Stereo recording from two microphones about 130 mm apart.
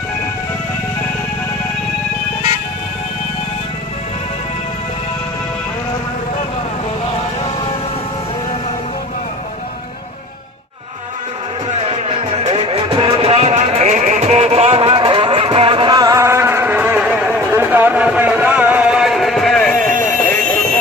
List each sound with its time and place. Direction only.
11.7 s music: 50° right (ahead or behind); by 20.3 s 10° left (ahead or behind)